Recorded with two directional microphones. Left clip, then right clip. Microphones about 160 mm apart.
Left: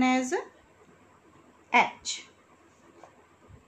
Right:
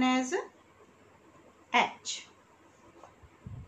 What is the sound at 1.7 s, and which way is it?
Speech, 55° left (ahead or behind).